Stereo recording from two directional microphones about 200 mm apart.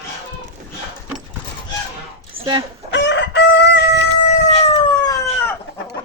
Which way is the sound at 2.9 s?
60° left (ahead or behind).